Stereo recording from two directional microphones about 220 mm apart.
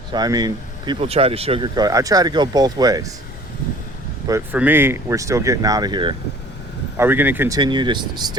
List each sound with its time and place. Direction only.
0.1 s speech: 15° right (ahead or behind)
4.3 s speech: 10° right (ahead or behind)
6.9 s speech: 10° right (ahead or behind)